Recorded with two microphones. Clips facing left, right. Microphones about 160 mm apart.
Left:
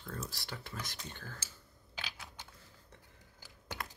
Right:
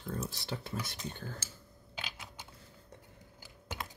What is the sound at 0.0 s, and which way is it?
Speech, 20° right (ahead or behind).